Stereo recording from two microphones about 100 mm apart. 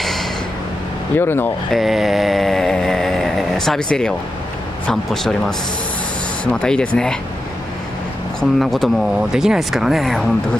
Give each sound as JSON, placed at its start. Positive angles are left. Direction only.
{"t": 0.0, "sound": "a sound", "side_deg": 0}
{"t": 1.1, "sound": "speech", "side_deg": 20}
{"t": 1.7, "sound": "vehicle", "side_deg": 0}
{"t": 4.8, "sound": "speech", "side_deg": 5}
{"t": 6.4, "sound": "speech", "side_deg": 10}
{"t": 8.4, "sound": "speech", "side_deg": 0}